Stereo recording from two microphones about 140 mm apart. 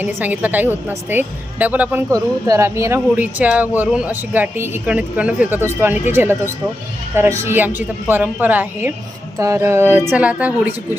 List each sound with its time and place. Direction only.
0.0 s a woman's voice: 15° right (ahead or behind)